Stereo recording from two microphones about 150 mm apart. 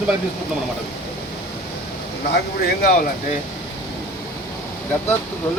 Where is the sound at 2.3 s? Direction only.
90° left.